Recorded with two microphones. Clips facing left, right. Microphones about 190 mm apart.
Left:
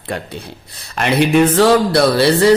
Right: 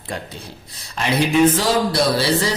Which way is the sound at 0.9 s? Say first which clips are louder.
Left 5 dB; 65° left (ahead or behind).